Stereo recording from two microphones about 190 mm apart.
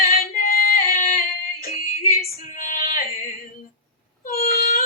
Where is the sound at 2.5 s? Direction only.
45° left (ahead or behind).